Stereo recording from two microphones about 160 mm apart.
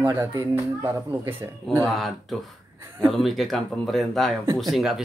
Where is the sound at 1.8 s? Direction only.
Centre (ahead or behind).